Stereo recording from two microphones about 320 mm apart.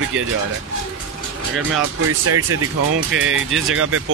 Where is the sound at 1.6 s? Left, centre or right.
Right.